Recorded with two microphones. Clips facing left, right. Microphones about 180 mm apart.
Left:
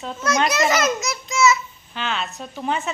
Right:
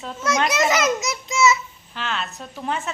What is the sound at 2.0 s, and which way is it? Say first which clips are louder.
Speech: left 2 dB; centre (ahead or behind).